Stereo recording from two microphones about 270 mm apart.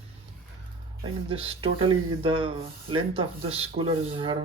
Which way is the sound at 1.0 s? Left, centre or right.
Centre.